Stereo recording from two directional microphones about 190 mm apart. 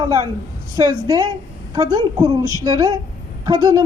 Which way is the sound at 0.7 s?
20° right (ahead or behind).